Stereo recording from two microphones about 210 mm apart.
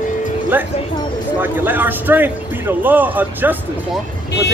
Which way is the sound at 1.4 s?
10° right (ahead or behind).